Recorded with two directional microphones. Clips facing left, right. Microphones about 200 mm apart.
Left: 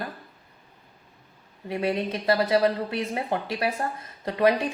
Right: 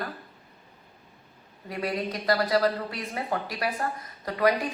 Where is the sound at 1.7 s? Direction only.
25° left (ahead or behind).